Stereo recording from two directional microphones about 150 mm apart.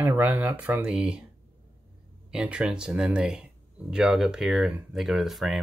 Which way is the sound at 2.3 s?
5° right (ahead or behind).